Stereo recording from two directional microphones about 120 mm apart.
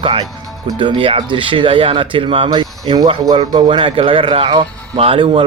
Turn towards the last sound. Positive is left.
turn(degrees=-45)  # may be behind; listen again after turning